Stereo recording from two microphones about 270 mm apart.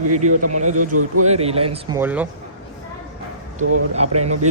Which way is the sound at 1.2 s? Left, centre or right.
Right.